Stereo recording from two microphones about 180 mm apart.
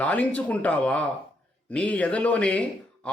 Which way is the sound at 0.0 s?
10° left (ahead or behind).